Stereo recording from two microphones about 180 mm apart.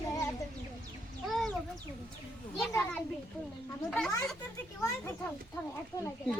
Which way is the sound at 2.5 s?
5° left (ahead or behind).